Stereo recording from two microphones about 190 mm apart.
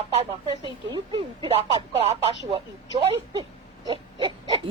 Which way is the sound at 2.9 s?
20° right (ahead or behind).